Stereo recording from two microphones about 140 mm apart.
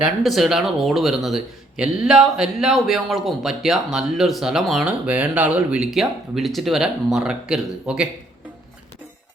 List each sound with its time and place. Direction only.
0.0 s speech: centre (ahead or behind)